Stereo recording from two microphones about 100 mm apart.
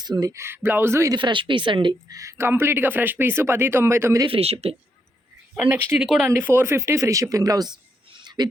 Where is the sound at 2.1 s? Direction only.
30° right (ahead or behind).